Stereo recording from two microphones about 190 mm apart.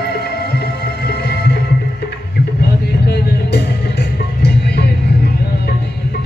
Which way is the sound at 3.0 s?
60° left (ahead or behind).